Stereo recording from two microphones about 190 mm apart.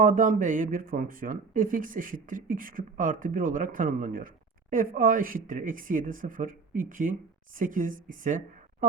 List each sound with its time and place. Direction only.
0.0 s speech: 45° right (ahead or behind)